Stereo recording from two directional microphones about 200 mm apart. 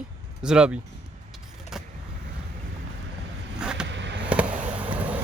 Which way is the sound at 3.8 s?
65° right (ahead or behind).